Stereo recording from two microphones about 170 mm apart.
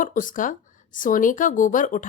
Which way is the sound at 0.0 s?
50° left (ahead or behind).